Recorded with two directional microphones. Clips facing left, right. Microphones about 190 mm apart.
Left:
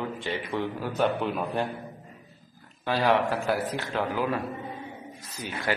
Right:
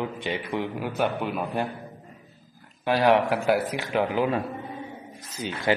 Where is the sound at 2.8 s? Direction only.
15° right (ahead or behind).